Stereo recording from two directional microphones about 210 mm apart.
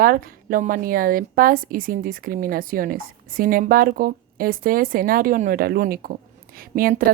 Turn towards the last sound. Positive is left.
turn(degrees=-40)  # may be behind; listen again after turning